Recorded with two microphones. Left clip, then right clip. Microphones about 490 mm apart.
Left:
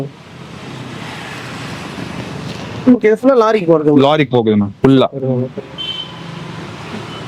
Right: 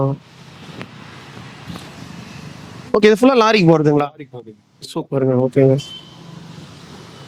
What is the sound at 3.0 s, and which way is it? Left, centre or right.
Speech, right.